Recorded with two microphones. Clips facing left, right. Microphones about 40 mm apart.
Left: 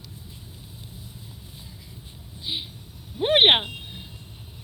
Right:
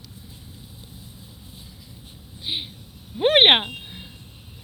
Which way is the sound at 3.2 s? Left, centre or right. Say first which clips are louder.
Right 2 dB; right.